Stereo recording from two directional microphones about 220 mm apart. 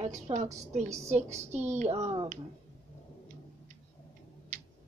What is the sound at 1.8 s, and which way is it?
Speech, 30° right (ahead or behind).